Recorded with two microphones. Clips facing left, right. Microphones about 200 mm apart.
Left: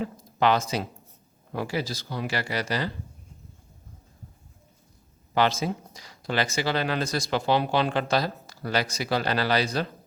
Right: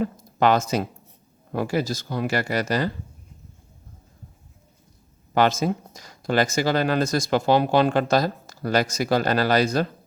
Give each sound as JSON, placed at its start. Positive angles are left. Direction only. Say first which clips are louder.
{"t": 0.0, "sound": "speech", "louder": "right 3 dB", "side_deg": -45}
{"t": 5.3, "sound": "speech", "louder": "right 4 dB", "side_deg": -50}